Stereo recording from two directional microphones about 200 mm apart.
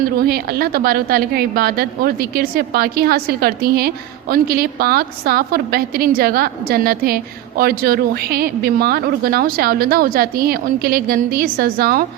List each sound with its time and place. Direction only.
0.2 s a woman's voice: 50° right (ahead or behind)